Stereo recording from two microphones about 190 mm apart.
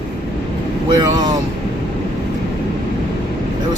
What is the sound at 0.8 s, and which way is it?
Speech, 20° right (ahead or behind).